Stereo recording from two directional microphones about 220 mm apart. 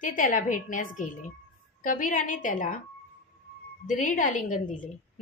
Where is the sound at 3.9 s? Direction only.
35° left (ahead or behind).